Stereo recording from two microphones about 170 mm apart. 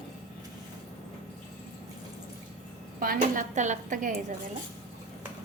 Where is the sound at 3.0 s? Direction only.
55° right (ahead or behind).